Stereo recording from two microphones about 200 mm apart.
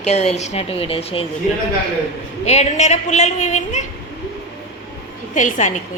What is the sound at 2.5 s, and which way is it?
A woman's voice, 35° left (ahead or behind).